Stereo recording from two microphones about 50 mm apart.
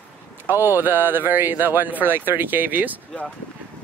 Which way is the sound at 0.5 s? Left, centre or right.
Right.